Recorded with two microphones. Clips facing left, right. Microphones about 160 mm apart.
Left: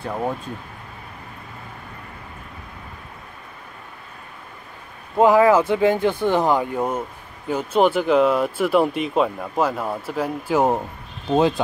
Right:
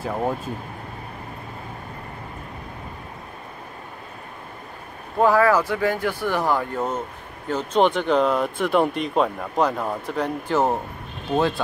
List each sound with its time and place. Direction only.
5.1 s speech: 20° left (ahead or behind)